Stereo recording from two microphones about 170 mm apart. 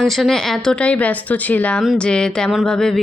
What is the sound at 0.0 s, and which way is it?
A woman's voice, centre (ahead or behind).